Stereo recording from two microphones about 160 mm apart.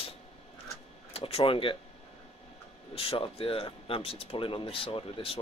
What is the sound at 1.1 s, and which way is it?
Speech, 35° left (ahead or behind).